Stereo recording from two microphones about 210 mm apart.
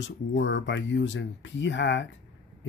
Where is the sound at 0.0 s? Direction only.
65° left (ahead or behind).